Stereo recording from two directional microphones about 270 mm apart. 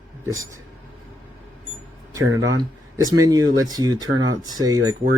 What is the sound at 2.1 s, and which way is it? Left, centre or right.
Speech, centre.